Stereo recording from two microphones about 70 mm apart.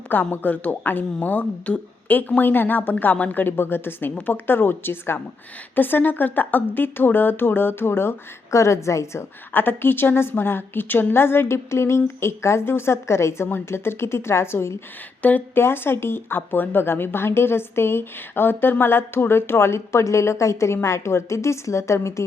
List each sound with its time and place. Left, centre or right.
0.1 s a woman's voice: left
9.5 s a woman's voice: left
15.2 s a woman's voice: left